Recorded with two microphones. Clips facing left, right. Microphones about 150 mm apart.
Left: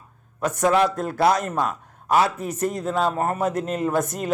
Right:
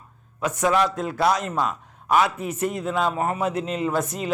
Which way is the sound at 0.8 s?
55° left (ahead or behind).